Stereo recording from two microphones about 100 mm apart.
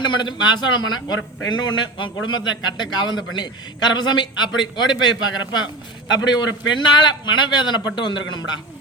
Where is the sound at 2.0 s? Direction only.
50° left (ahead or behind).